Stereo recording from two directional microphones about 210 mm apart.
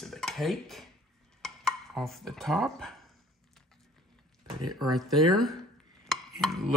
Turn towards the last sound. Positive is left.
turn(degrees=0)  # may be behind; listen again after turning